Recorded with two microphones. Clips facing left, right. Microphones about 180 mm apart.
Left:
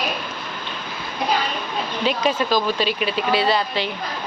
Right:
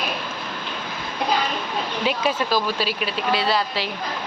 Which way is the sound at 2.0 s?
10° right (ahead or behind).